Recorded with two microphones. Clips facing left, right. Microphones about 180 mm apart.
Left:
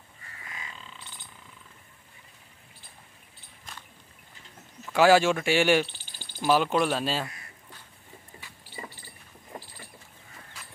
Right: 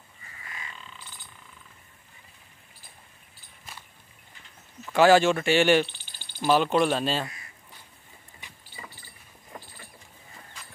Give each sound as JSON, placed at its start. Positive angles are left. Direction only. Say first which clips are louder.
{"t": 4.8, "sound": "speech", "louder": "right 1 dB", "side_deg": 5}
{"t": 8.4, "sound": "rodents", "louder": "even", "side_deg": -20}